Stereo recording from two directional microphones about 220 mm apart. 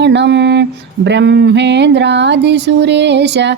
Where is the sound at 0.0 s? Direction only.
50° right (ahead or behind).